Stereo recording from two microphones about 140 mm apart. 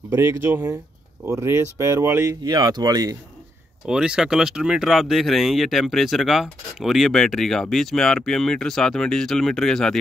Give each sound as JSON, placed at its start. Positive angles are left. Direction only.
{"t": 0.1, "sound": "speech", "side_deg": -15}
{"t": 2.4, "sound": "speech", "side_deg": -30}
{"t": 3.8, "sound": "speech", "side_deg": -5}